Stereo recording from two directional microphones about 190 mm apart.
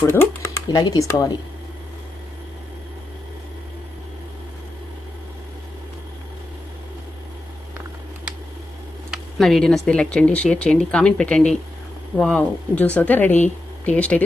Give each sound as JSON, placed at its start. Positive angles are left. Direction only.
{"t": 0.0, "sound": "speech", "side_deg": 15}
{"t": 9.0, "sound": "speech", "side_deg": 0}